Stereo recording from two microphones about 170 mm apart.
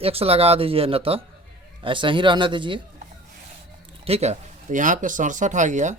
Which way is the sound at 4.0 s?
40° right (ahead or behind).